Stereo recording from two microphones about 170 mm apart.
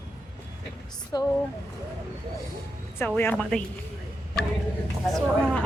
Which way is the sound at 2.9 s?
10° left (ahead or behind).